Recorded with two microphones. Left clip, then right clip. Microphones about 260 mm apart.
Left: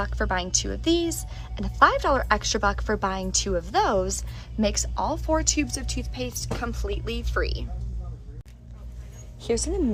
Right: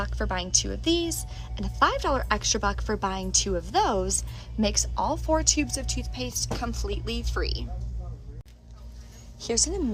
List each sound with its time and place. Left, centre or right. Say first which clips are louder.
0.0 s a woman's voice: left 4 dB; centre
9.4 s a woman's voice: left 1 dB; centre